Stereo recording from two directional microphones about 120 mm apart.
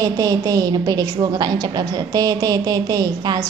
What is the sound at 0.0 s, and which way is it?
A woman's voice, 30° right (ahead or behind).